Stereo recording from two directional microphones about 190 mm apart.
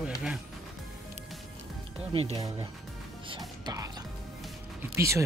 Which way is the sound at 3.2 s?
25° right (ahead or behind).